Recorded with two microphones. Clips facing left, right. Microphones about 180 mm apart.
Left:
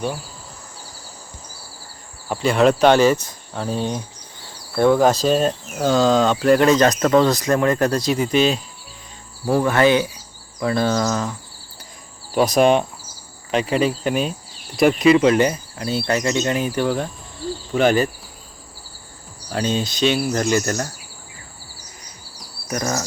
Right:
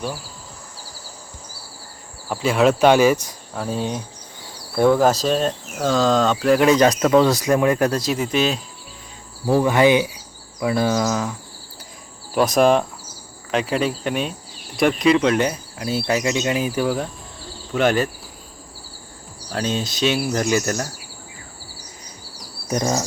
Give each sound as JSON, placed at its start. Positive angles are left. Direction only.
{"t": 2.3, "sound": "speech", "side_deg": -5}
{"t": 9.5, "sound": "speech", "side_deg": -15}
{"t": 19.5, "sound": "speech", "side_deg": 0}
{"t": 22.7, "sound": "insect", "side_deg": -25}